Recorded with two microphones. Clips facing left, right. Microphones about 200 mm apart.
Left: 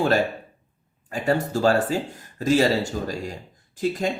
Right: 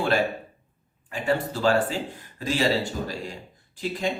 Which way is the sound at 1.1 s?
40° left (ahead or behind).